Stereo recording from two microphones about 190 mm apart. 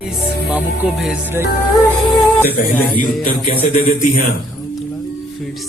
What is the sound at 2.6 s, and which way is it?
Music, 45° left (ahead or behind).